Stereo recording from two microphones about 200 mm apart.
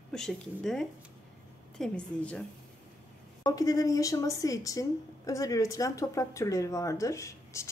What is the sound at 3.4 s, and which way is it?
A woman's voice, 20° left (ahead or behind).